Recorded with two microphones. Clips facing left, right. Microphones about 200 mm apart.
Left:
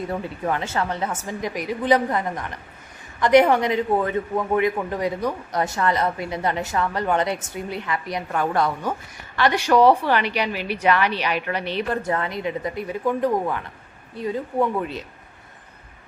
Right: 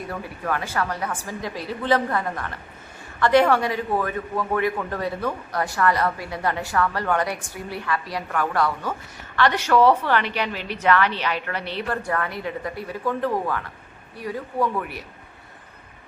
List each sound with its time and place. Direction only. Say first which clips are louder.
0.1 s a man's voice: even; 20° left (ahead or behind)